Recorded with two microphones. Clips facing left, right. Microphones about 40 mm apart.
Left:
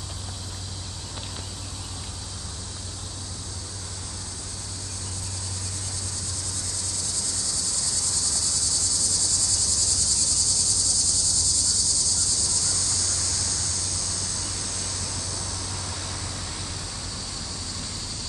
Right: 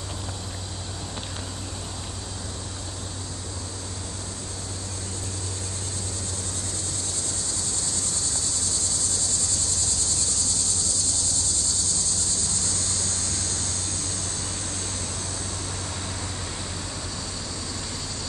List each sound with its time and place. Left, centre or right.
7.0 s cricket: right